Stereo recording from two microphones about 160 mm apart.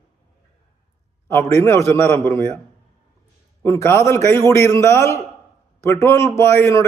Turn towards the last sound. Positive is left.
turn(degrees=15)  # may be behind; listen again after turning